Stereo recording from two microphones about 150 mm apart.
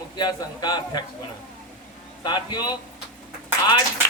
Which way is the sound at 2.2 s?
30° left (ahead or behind).